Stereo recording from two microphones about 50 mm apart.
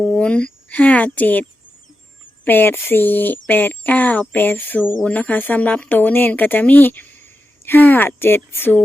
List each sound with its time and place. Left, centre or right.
0.0 s speech: left
4.4 s speech: left
5.0 s speech: left